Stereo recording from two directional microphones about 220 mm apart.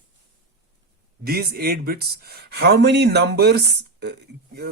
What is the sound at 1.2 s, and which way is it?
Speech, 45° right (ahead or behind).